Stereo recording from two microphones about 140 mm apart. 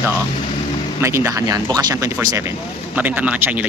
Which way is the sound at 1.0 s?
20° right (ahead or behind).